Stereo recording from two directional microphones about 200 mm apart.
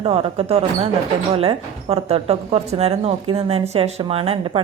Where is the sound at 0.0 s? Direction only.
30° right (ahead or behind).